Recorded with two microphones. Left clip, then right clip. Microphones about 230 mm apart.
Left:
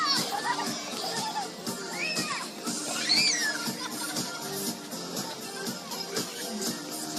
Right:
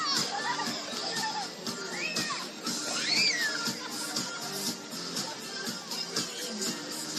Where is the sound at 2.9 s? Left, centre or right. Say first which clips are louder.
Left 2 dB; left.